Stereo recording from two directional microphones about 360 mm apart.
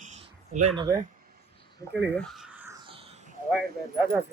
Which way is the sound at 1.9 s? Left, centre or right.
Centre.